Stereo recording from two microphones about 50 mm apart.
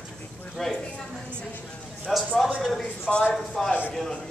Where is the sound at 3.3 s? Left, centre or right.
Centre.